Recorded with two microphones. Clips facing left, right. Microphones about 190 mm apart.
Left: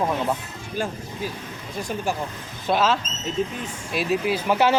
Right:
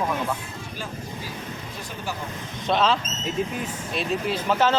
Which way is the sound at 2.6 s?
5° left (ahead or behind).